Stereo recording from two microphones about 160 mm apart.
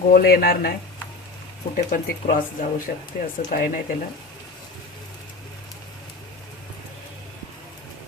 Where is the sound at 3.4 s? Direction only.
60° left (ahead or behind).